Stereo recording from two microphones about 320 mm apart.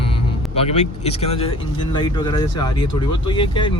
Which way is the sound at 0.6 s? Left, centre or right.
Centre.